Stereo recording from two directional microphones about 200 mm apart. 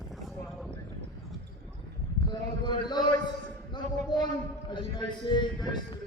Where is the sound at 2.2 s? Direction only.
20° left (ahead or behind).